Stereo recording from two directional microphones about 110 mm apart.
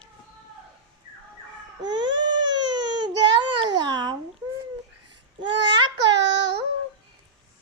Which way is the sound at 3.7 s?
40° right (ahead or behind).